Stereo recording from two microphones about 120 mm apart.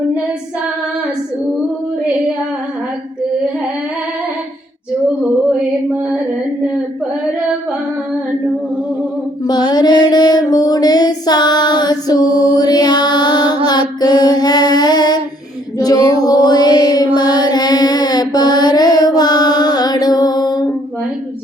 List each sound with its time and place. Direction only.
9.5 s female singing: 35° left (ahead or behind)
13.7 s child singing: 35° left (ahead or behind)
15.8 s female singing: 30° left (ahead or behind)
17.2 s mantra: 35° left (ahead or behind)